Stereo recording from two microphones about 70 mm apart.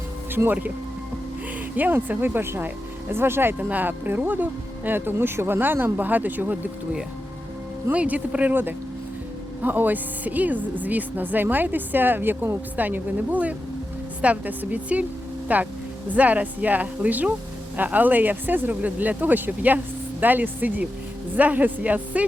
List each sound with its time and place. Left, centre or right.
0.3 s speech: right
1.7 s speech: right
7.9 s speech: centre